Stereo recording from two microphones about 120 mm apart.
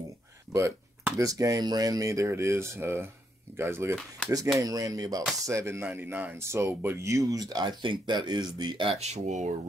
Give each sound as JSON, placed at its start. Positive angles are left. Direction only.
{"t": 0.5, "sound": "speech", "side_deg": -25}
{"t": 8.9, "sound": "speech", "side_deg": -70}